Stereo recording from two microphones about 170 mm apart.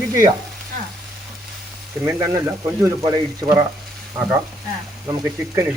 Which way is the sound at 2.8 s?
20° right (ahead or behind).